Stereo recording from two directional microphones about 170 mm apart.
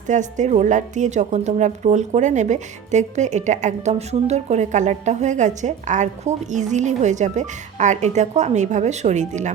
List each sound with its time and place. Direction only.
0.1 s a woman's voice: 45° right (ahead or behind)